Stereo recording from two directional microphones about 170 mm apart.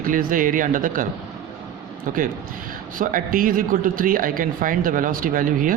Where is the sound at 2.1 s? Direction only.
50° right (ahead or behind).